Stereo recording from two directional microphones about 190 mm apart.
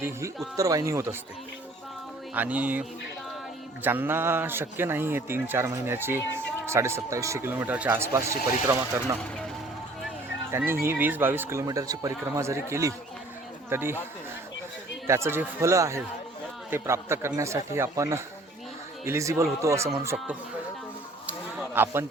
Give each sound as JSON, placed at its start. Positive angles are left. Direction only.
{"t": 0.5, "sound": "a man's voice", "side_deg": -20}
{"t": 2.3, "sound": "a man's voice", "side_deg": -10}
{"t": 3.8, "sound": "a man's voice", "side_deg": -10}
{"t": 10.5, "sound": "a man's voice", "side_deg": -10}
{"t": 15.0, "sound": "a man's voice", "side_deg": -15}
{"t": 21.8, "sound": "a man's voice", "side_deg": -10}